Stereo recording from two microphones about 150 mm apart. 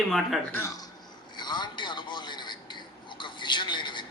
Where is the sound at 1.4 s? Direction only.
30° left (ahead or behind).